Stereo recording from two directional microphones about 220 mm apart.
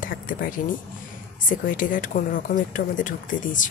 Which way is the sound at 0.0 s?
40° left (ahead or behind).